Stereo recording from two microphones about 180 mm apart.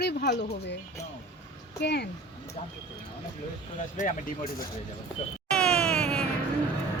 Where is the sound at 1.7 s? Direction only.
65° left (ahead or behind).